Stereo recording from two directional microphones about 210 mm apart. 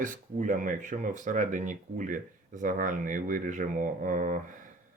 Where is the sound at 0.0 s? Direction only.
40° right (ahead or behind).